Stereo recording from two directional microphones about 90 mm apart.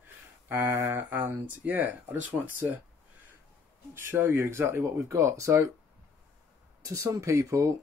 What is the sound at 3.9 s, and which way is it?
Speech, 25° right (ahead or behind).